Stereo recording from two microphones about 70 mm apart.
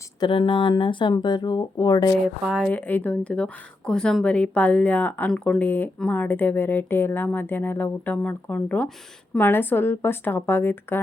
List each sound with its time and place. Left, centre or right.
0.2 s speech: left
2.6 s speech: left